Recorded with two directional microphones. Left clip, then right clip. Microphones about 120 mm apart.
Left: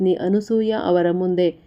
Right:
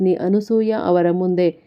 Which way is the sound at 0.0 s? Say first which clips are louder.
Right 1 dB; 20° right (ahead or behind).